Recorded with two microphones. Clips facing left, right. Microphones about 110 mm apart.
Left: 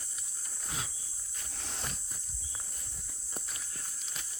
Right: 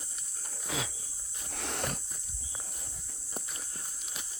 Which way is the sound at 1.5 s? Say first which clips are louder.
Right 8 dB; 70° right (ahead or behind).